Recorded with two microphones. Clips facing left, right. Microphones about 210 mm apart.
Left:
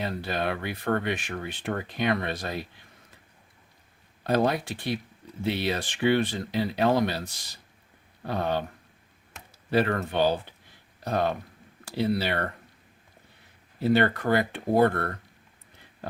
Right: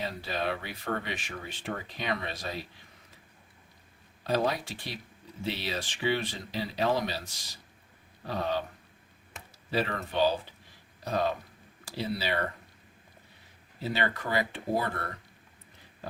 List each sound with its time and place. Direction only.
0.0 s speech: 55° left (ahead or behind)
4.2 s speech: 55° left (ahead or behind)
8.3 s speech: 55° left (ahead or behind)
9.6 s speech: 55° left (ahead or behind)
13.8 s speech: 55° left (ahead or behind)